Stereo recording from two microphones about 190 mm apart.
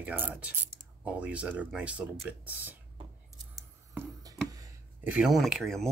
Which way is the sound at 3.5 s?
15° right (ahead or behind).